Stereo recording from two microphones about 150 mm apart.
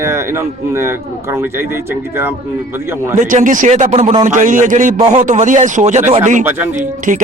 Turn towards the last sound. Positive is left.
turn(degrees=-60)  # may be behind; listen again after turning